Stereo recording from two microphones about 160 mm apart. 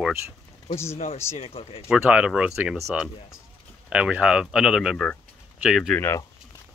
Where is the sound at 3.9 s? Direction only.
5° right (ahead or behind).